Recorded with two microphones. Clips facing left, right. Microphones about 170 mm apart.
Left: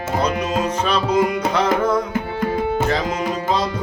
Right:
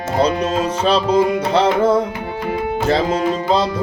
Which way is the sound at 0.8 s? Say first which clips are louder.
Right 4 dB; 30° right (ahead or behind).